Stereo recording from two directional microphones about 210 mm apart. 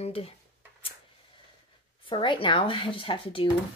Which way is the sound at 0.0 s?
30° left (ahead or behind).